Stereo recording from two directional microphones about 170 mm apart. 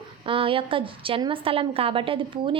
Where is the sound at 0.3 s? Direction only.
30° right (ahead or behind).